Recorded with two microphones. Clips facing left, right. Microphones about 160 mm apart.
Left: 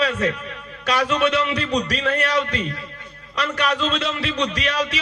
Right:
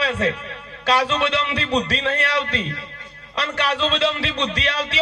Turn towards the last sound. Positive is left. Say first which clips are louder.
# left 1 dB
turn(degrees=-30)  # may be behind; listen again after turning